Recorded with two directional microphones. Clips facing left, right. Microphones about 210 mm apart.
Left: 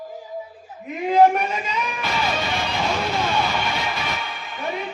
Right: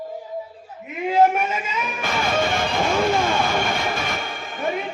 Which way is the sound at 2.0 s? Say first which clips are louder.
Right 5 dB; 50° right (ahead or behind).